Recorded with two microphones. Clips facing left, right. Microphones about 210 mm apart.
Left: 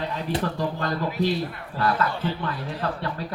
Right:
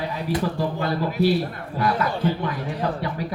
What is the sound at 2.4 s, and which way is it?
Speech, 15° right (ahead or behind).